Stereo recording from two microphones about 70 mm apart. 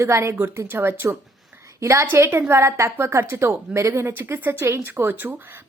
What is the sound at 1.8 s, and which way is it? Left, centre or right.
A woman's voice, right.